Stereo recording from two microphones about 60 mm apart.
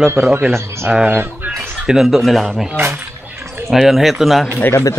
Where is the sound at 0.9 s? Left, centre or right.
Right.